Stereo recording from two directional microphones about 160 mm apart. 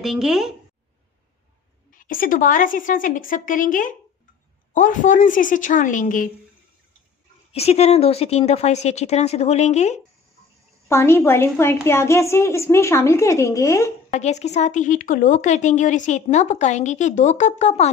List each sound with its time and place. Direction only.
0.0 s speech: centre (ahead or behind)
1.9 s a woman's voice: 60° left (ahead or behind)
7.5 s speech: 40° left (ahead or behind)
10.9 s a woman's voice: 15° left (ahead or behind)
14.1 s a woman's voice: 45° left (ahead or behind)